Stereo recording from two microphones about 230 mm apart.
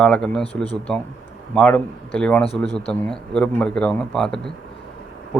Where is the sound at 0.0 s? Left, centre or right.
Centre.